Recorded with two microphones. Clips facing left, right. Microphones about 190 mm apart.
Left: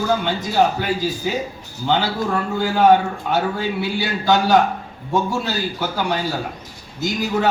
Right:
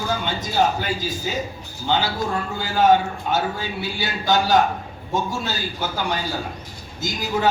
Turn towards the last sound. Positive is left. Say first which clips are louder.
# left 2 dB
turn(degrees=65)  # may be behind; listen again after turning